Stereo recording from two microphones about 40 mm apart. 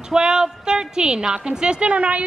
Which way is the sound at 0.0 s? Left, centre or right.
Centre.